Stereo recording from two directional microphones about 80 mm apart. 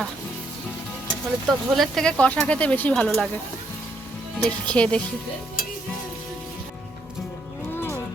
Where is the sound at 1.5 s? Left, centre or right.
Centre.